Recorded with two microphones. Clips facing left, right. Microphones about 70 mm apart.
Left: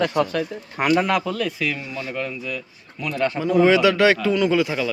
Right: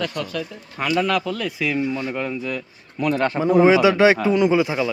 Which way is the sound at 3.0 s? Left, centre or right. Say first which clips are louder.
Right 3 dB; right.